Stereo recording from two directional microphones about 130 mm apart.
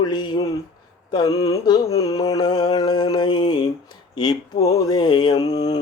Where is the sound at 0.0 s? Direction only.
35° left (ahead or behind).